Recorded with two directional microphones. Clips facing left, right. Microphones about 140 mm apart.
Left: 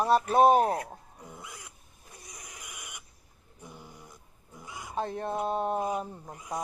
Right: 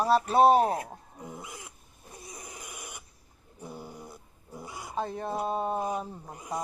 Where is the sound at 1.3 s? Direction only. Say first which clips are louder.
Right 3 dB; 20° right (ahead or behind).